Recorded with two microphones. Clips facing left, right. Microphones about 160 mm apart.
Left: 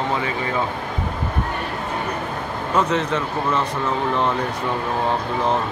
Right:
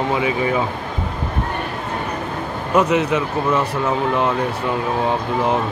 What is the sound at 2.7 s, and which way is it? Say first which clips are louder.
Speech: right 4 dB; 10° right (ahead or behind).